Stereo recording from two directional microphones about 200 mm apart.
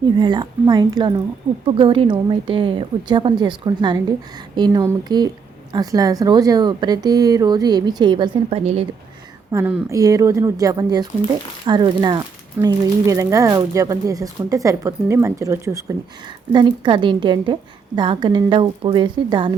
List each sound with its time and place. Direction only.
0.0 s a woman's voice: 20° right (ahead or behind)
9.5 s a woman's voice: 10° right (ahead or behind)